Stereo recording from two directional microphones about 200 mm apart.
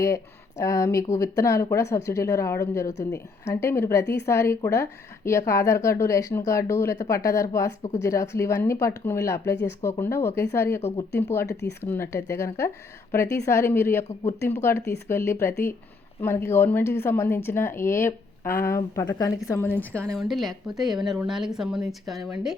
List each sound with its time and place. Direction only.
0.6 s a woman's voice: 15° left (ahead or behind)
10.8 s speech: 30° left (ahead or behind)
11.1 s a woman's voice: 10° left (ahead or behind)